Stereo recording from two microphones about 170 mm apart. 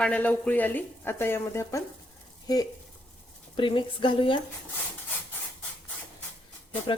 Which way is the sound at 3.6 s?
30° left (ahead or behind).